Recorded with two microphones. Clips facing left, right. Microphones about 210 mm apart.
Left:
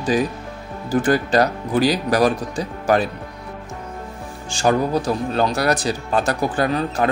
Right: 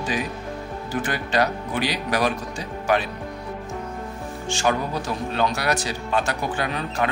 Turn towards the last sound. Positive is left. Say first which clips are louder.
# left 6 dB
turn(degrees=35)  # may be behind; listen again after turning